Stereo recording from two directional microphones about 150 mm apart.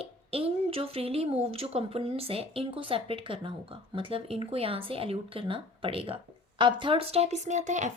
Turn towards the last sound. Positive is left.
turn(degrees=-55)  # may be behind; listen again after turning